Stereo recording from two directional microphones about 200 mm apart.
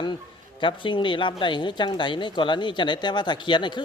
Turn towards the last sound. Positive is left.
turn(degrees=25)  # may be behind; listen again after turning